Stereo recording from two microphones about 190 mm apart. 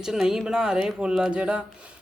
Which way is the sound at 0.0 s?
5° right (ahead or behind).